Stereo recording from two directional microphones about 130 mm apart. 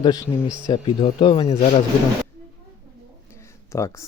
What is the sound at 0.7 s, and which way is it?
Speech, 40° left (ahead or behind).